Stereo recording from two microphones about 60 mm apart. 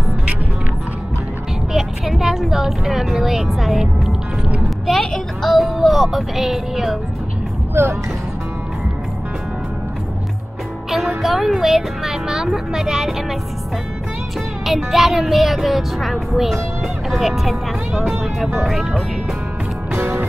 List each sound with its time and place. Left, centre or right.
1.7 s speech: centre
7.8 s speech: right
10.9 s speech: centre
14.7 s speech: centre
20.0 s music: right